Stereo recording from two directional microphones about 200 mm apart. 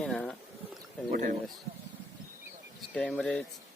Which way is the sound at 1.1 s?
40° right (ahead or behind).